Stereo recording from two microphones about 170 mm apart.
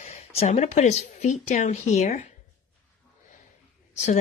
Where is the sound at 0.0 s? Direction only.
40° left (ahead or behind).